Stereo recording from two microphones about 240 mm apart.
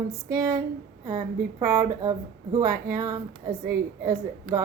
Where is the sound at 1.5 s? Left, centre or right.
Centre.